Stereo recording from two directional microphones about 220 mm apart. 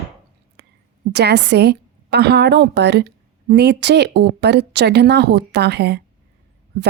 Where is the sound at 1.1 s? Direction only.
50° right (ahead or behind).